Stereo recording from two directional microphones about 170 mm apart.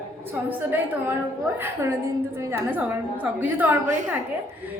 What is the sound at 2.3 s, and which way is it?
A woman's voice, 15° right (ahead or behind).